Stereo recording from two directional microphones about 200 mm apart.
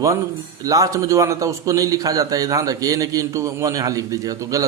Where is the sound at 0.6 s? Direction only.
15° right (ahead or behind).